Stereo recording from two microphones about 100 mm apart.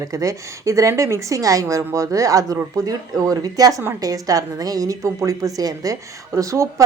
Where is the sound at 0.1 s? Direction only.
35° right (ahead or behind).